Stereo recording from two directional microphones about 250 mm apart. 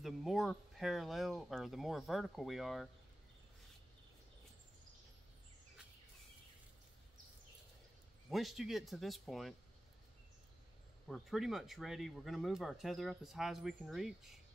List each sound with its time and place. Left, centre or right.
0.0 s speech: centre
8.3 s speech: centre
11.1 s speech: centre